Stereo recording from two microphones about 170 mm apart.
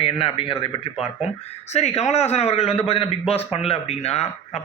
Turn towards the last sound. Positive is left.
turn(degrees=40)  # may be behind; listen again after turning